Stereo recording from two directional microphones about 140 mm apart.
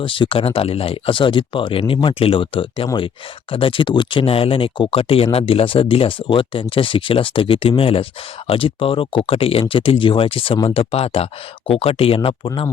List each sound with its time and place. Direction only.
0.0 s speech: 40° left (ahead or behind)